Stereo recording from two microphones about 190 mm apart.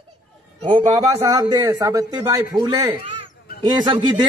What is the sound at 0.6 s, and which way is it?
A man's voice, 25° right (ahead or behind).